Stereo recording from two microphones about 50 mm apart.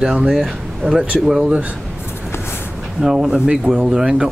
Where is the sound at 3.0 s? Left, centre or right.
Centre.